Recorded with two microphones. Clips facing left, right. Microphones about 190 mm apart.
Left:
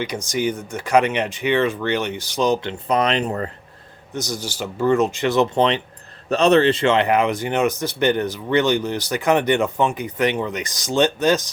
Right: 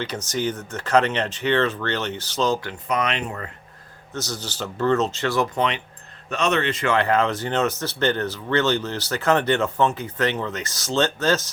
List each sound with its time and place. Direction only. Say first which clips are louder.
0.0 s speech: left 3 dB; 10° left (ahead or behind)
2.8 s speech: left 6 dB; 35° left (ahead or behind)
4.1 s speech: left 3 dB; 15° left (ahead or behind)